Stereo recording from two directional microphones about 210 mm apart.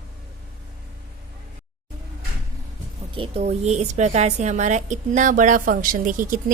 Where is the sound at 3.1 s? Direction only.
30° right (ahead or behind).